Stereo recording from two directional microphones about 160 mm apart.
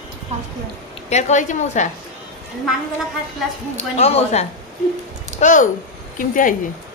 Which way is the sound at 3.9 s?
40° left (ahead or behind).